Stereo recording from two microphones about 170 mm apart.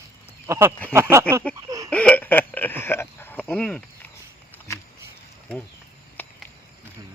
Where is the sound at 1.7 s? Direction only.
20° right (ahead or behind).